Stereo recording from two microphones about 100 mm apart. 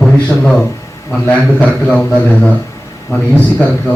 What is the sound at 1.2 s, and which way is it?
Speech, 15° left (ahead or behind).